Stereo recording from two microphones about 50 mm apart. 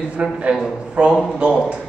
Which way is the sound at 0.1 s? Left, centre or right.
Right.